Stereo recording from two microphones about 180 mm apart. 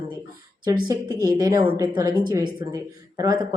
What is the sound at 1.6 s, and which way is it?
Speech, 10° right (ahead or behind).